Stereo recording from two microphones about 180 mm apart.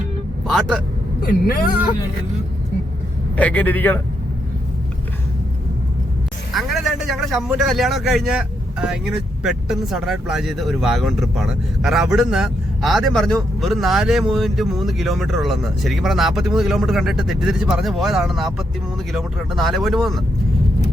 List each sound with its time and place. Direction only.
0.4 s speech: centre (ahead or behind)
1.2 s speech: 55° left (ahead or behind)
3.3 s a man's voice: 10° left (ahead or behind)
6.5 s a man's voice: centre (ahead or behind)